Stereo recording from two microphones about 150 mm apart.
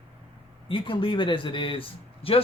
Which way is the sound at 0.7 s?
35° left (ahead or behind).